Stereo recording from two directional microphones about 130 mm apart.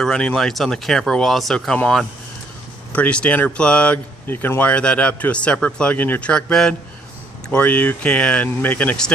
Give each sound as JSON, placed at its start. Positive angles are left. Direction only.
{"t": 0.0, "sound": "speech", "side_deg": 5}